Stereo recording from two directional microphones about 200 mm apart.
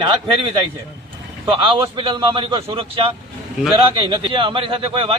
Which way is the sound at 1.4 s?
25° right (ahead or behind).